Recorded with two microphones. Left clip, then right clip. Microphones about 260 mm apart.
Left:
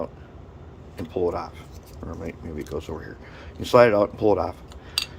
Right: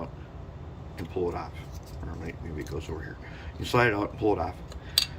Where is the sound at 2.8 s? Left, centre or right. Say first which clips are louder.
Left 3 dB; left.